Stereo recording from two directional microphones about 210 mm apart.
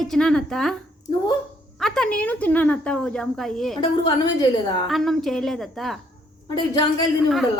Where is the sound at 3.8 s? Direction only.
20° left (ahead or behind).